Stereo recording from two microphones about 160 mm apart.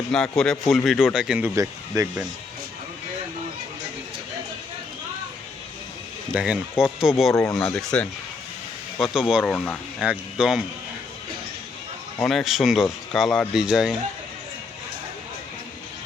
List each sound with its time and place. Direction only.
0.1 s speech: 5° left (ahead or behind)
6.3 s speech: 5° right (ahead or behind)
7.3 s speech: 20° left (ahead or behind)
7.6 s speech: 5° left (ahead or behind)
9.1 s speech: 5° right (ahead or behind)
9.4 s speech: 10° left (ahead or behind)
10.0 s speech: 5° right (ahead or behind)
12.2 s speech: centre (ahead or behind)